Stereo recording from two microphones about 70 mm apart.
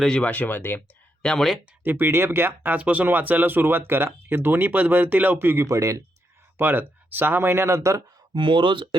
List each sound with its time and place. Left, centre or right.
0.0 s speech: centre
0.3 s speech: left
1.2 s speech: centre
1.8 s speech: right
5.6 s speech: right
6.6 s speech: right